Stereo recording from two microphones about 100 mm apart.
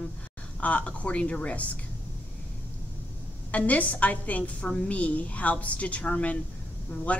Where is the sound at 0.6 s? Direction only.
15° left (ahead or behind).